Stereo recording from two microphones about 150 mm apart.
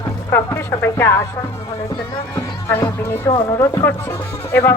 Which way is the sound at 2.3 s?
15° left (ahead or behind).